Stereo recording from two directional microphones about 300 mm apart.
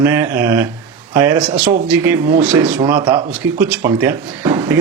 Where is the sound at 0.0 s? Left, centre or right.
Centre.